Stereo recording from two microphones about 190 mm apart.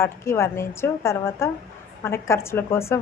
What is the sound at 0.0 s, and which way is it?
A woman's voice, 15° left (ahead or behind).